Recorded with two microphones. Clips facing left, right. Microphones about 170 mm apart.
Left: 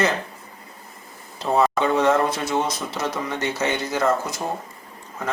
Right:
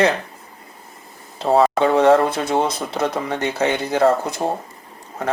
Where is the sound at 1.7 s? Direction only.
65° right (ahead or behind).